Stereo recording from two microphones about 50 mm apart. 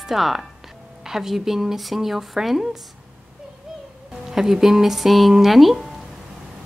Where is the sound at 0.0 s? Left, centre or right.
Centre.